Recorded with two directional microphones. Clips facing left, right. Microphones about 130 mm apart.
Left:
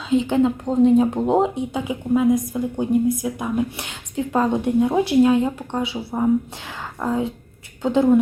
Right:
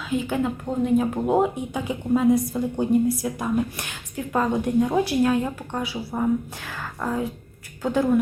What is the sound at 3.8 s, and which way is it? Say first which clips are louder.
Speech: left 5 dB; 20° left (ahead or behind).